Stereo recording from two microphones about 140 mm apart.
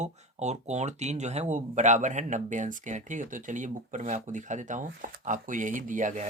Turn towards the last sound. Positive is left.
turn(degrees=-65)  # may be behind; listen again after turning